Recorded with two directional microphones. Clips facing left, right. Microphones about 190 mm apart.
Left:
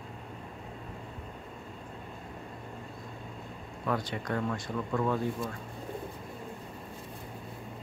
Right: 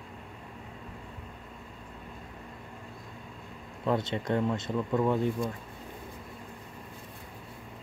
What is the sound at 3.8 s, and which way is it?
Speech, 25° right (ahead or behind).